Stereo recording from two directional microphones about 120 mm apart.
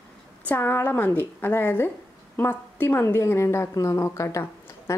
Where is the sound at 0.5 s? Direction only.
15° left (ahead or behind).